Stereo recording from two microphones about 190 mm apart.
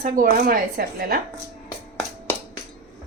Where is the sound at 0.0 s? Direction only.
50° right (ahead or behind).